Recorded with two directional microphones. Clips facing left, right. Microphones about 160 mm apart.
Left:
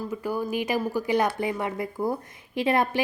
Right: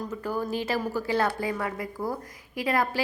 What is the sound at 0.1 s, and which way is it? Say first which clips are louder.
A woman's voice: left 2 dB; 10° left (ahead or behind).